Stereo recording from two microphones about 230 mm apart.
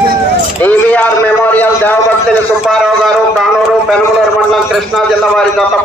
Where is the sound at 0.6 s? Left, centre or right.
Centre.